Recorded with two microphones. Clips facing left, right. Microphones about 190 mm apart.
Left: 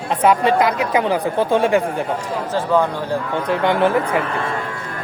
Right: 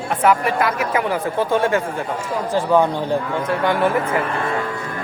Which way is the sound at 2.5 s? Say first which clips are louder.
Right 1 dB; 15° right (ahead or behind).